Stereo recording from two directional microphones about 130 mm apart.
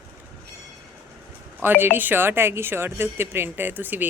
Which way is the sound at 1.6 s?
15° right (ahead or behind).